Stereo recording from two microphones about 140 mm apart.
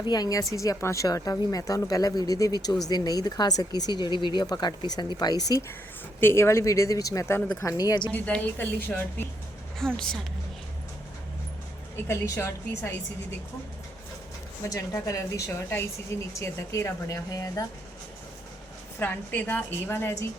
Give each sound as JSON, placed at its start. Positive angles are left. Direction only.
{"t": 0.1, "sound": "speech", "side_deg": 25}
{"t": 6.1, "sound": "speech", "side_deg": 15}
{"t": 8.1, "sound": "a woman's voice", "side_deg": 10}
{"t": 9.7, "sound": "a woman's voice", "side_deg": 5}
{"t": 12.0, "sound": "speech", "side_deg": 20}
{"t": 14.6, "sound": "a woman's voice", "side_deg": 25}
{"t": 18.9, "sound": "a woman's voice", "side_deg": 15}